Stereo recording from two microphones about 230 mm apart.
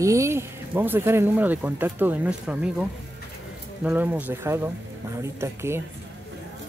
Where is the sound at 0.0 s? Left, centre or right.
Centre.